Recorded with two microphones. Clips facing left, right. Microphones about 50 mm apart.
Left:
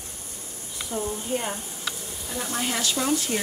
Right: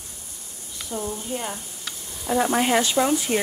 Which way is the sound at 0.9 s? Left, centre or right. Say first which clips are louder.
Even; centre.